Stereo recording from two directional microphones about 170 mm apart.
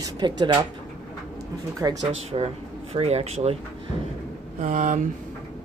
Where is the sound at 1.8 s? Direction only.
20° right (ahead or behind).